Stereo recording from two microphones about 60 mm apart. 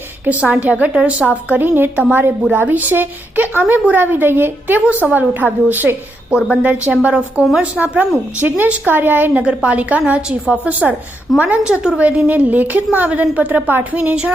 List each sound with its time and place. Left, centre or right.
0.3 s a woman's voice: right
1.6 s a woman's voice: right
4.9 s a woman's voice: right
6.3 s a woman's voice: centre
7.8 s a woman's voice: right
9.3 s a woman's voice: centre
11.6 s a woman's voice: centre
11.9 s a woman's voice: right